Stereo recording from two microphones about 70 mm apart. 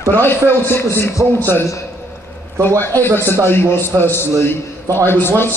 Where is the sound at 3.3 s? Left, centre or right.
Left.